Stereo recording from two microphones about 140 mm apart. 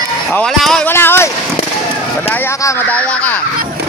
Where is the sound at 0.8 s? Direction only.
15° left (ahead or behind).